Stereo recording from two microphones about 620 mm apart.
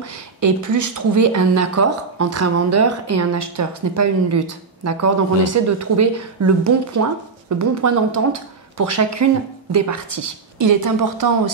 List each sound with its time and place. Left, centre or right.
0.4 s speech: right
8.7 s speech: right